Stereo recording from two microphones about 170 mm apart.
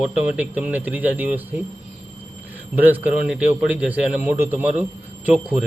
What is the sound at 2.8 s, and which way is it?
A man's voice, 5° right (ahead or behind).